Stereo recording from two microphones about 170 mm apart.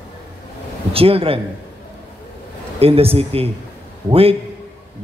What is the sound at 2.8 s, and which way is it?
A man's voice, 35° right (ahead or behind).